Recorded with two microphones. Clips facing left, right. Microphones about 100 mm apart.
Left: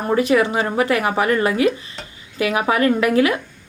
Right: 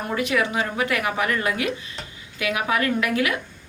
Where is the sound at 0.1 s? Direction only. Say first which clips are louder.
Left 7 dB; 35° left (ahead or behind).